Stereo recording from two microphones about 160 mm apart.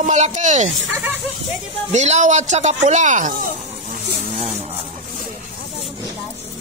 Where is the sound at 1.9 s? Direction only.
50° right (ahead or behind).